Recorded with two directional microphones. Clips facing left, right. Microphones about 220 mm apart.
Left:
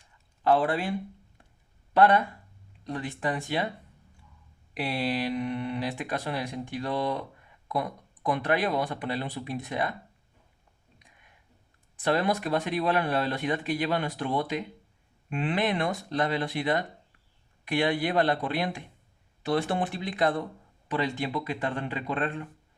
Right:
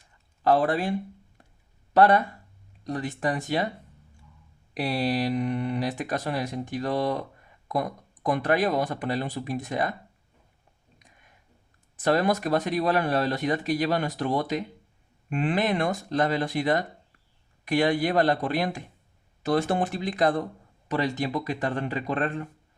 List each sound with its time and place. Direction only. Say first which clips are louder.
0.4 s speech: right 2 dB; 40° right (ahead or behind)
1.9 s speech: right 2 dB; 40° right (ahead or behind)
4.7 s speech: right 3 dB; 40° right (ahead or behind)
11.9 s speech: right 3 dB; 45° right (ahead or behind)